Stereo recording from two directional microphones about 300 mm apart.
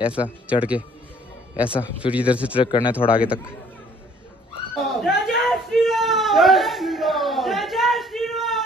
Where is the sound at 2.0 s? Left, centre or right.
Centre.